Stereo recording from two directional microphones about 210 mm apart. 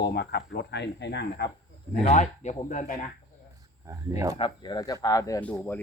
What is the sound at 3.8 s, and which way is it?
Speech, 15° right (ahead or behind).